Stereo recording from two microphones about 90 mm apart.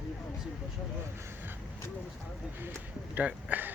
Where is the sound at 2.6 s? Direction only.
25° right (ahead or behind).